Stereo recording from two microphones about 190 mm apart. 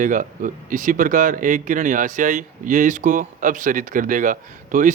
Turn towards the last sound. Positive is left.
turn(degrees=-45)  # may be behind; listen again after turning